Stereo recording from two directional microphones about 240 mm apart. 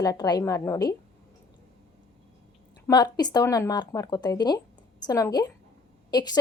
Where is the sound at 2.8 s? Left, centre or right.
Centre.